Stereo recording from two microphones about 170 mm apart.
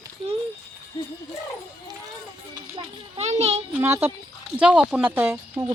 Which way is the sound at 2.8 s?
35° right (ahead or behind).